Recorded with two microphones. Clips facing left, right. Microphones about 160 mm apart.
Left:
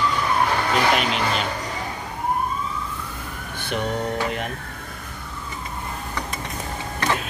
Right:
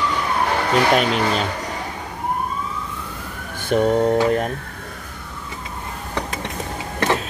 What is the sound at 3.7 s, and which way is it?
Speech, 40° right (ahead or behind).